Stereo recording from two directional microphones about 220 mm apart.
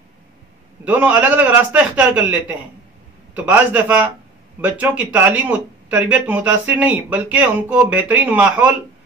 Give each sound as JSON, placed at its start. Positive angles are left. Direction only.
{"t": 0.8, "sound": "speech", "side_deg": -5}